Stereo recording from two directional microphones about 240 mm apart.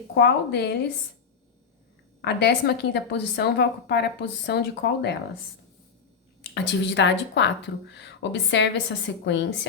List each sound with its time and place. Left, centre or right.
0.2 s a woman's voice: left
2.2 s a woman's voice: left
6.5 s a woman's voice: left